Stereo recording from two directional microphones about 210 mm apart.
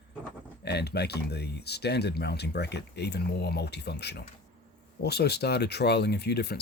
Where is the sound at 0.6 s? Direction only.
50° left (ahead or behind).